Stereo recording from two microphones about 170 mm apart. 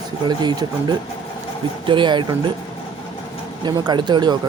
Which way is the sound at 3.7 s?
25° right (ahead or behind).